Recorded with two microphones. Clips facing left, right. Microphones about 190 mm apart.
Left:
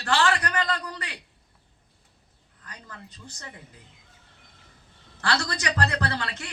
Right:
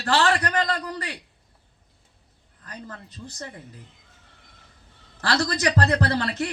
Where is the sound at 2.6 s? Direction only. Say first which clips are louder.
Right 6 dB; 35° right (ahead or behind).